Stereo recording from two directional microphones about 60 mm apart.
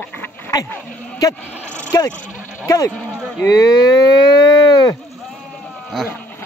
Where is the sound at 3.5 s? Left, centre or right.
Left.